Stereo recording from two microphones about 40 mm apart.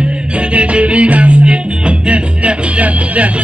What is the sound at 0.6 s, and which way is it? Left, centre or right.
Music, right.